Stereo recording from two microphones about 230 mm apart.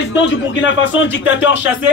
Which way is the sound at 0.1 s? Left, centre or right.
Left.